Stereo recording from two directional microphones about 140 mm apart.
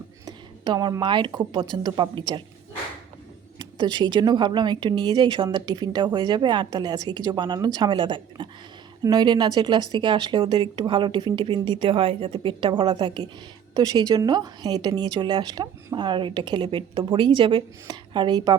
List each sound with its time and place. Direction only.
0.3 s speech: 30° right (ahead or behind)
3.6 s a woman's voice: 30° right (ahead or behind)